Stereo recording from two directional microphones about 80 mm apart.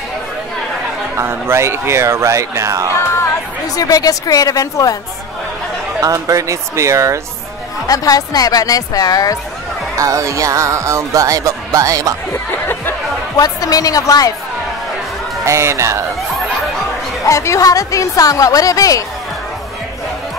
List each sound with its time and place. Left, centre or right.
1.1 s speech: right
3.6 s a woman's voice: left
5.9 s speech: right
7.8 s a woman's voice: left
9.9 s speech: right
12.3 s music: left
13.4 s a woman's voice: left
15.4 s speech: right
17.2 s a woman's voice: left